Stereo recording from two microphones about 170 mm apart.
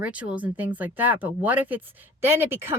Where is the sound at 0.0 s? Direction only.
10° right (ahead or behind).